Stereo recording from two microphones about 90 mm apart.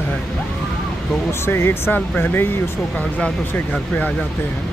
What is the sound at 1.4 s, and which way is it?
Speech, 25° left (ahead or behind).